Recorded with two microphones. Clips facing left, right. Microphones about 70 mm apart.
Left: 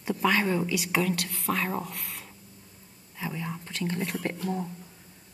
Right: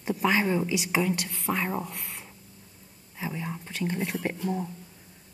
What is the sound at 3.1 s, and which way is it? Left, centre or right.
Whispering, centre.